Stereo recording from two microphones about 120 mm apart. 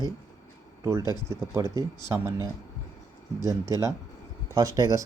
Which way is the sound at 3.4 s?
25° right (ahead or behind).